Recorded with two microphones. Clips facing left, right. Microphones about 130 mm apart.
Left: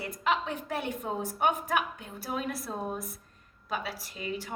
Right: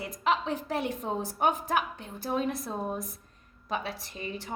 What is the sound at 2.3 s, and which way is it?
Speech, 30° right (ahead or behind).